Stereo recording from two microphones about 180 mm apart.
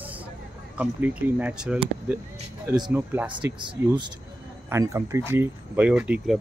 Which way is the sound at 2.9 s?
10° right (ahead or behind).